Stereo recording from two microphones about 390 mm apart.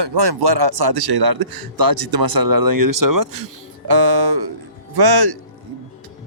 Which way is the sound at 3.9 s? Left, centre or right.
Right.